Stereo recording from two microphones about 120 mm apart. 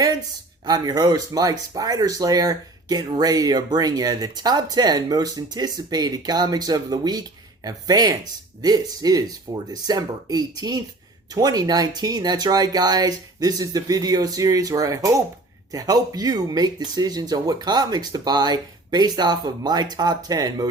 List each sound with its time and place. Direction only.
0.6 s speech: 35° right (ahead or behind)